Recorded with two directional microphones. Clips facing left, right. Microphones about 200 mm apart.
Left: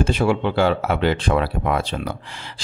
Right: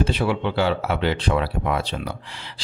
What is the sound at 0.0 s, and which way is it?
Speech, 50° left (ahead or behind).